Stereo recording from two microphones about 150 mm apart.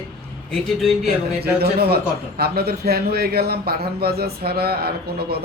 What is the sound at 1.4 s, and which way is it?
A man's voice, 90° right.